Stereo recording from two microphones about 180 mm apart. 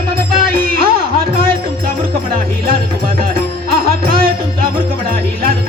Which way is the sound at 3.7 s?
55° right (ahead or behind).